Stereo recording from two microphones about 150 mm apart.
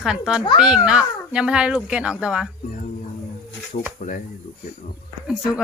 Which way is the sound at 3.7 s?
55° left (ahead or behind).